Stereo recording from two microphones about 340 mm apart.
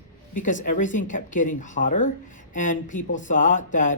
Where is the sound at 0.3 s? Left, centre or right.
Left.